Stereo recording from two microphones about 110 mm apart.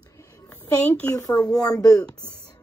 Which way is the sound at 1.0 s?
30° left (ahead or behind).